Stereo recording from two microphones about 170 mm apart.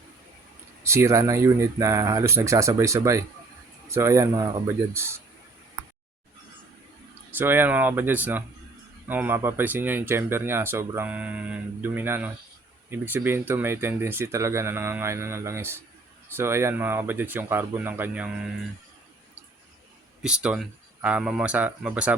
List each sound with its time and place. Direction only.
0.9 s speech: 15° right (ahead or behind)
7.3 s speech: 10° right (ahead or behind)
20.2 s speech: 5° right (ahead or behind)